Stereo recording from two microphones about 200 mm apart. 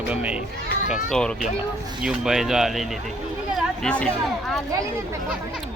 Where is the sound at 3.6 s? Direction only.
5° left (ahead or behind).